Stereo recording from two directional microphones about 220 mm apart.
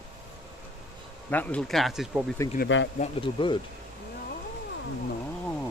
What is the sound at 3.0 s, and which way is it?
Speech, 25° left (ahead or behind).